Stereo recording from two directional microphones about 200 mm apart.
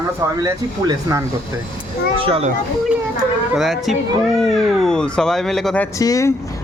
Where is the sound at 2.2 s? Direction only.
25° right (ahead or behind).